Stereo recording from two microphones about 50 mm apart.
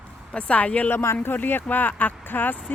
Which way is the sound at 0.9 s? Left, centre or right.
Left.